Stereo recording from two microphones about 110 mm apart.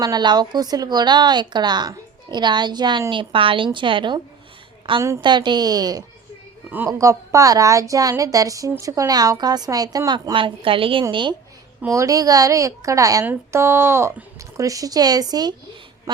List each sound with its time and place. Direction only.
0.0 s a woman's voice: 40° right (ahead or behind)
4.9 s speech: 25° right (ahead or behind)
5.2 s speech: 45° right (ahead or behind)
6.7 s speech: 15° right (ahead or behind)
7.0 s speech: 25° right (ahead or behind)
10.3 s a woman's voice: 55° right (ahead or behind)
11.9 s speech: 30° right (ahead or behind)